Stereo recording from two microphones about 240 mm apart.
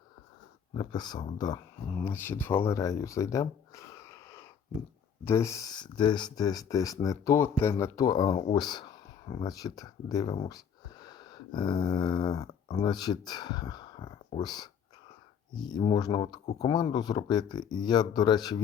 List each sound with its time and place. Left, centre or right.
0.7 s speech: centre